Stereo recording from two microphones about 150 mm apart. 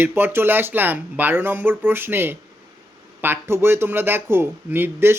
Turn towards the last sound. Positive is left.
turn(degrees=-15)  # may be behind; listen again after turning